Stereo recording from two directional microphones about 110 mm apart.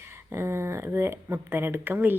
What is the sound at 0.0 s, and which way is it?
Speech, 25° right (ahead or behind).